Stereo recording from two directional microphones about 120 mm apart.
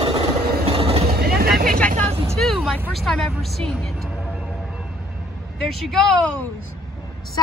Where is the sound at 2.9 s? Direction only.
5° left (ahead or behind).